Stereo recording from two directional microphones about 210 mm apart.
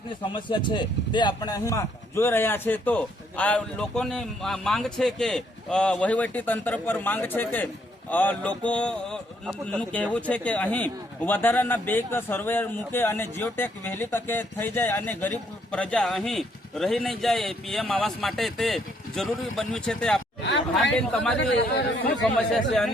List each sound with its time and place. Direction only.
0.1 s speech: 20° left (ahead or behind); by 20.2 s 5° left (ahead or behind)
21.3 s speech: 55° left (ahead or behind)
22.2 s speech: 5° left (ahead or behind)